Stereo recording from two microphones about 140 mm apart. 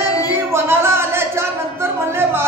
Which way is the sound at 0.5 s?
20° right (ahead or behind).